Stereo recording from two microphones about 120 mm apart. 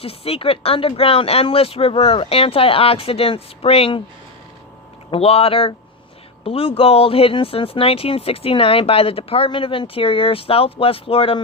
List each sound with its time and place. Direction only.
0.0 s speech: 55° left (ahead or behind)
5.1 s speech: 55° left (ahead or behind)